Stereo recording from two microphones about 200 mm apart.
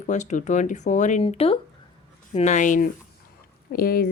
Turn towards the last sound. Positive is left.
turn(degrees=50)  # may be behind; listen again after turning